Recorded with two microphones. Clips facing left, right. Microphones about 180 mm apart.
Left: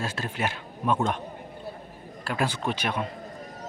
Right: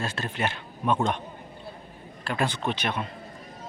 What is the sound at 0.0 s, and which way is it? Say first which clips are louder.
A man's voice: even; 10° left (ahead or behind).